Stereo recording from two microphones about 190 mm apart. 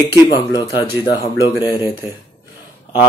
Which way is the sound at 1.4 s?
10° right (ahead or behind).